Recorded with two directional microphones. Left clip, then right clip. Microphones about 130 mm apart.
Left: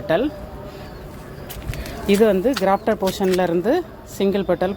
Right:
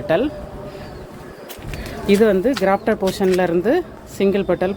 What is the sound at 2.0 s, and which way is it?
Speech, 20° left (ahead or behind).